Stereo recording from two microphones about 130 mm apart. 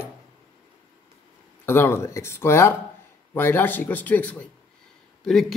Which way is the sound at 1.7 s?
20° left (ahead or behind).